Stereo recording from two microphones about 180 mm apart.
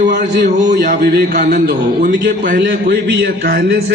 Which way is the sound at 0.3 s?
65° right (ahead or behind).